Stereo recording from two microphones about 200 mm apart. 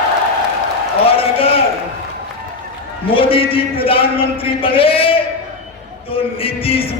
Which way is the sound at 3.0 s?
25° left (ahead or behind).